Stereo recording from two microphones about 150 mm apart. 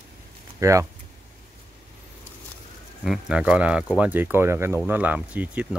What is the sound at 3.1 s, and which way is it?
Speech, 5° right (ahead or behind).